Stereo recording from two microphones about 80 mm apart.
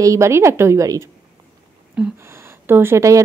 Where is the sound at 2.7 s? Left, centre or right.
Right.